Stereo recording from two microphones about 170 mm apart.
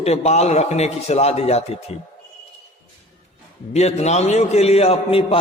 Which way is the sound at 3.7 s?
40° left (ahead or behind).